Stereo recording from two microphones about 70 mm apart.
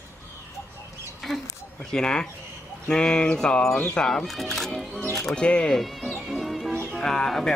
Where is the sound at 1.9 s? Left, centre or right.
Centre.